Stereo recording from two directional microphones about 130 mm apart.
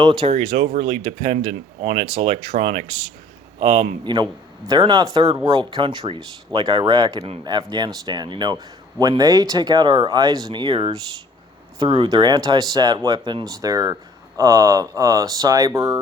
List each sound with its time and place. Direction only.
0.0 s a man's voice: 35° right (ahead or behind)
0.3 s a man's voice: 50° right (ahead or behind)
12.0 s a man's voice: 35° right (ahead or behind)